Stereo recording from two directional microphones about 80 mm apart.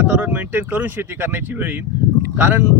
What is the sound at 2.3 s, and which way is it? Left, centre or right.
Speech, right.